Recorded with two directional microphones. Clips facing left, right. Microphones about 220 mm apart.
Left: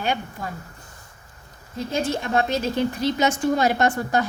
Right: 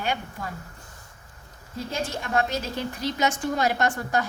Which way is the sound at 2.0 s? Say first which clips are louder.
Left 4 dB; 25° left (ahead or behind).